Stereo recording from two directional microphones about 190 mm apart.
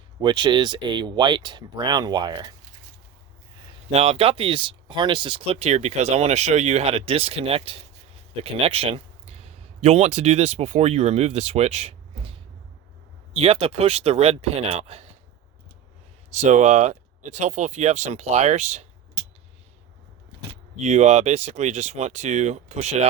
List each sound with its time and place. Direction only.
0.2 s speech: 25° right (ahead or behind)
3.9 s speech: 30° right (ahead or behind)
16.3 s speech: 35° right (ahead or behind)
20.7 s speech: 35° right (ahead or behind)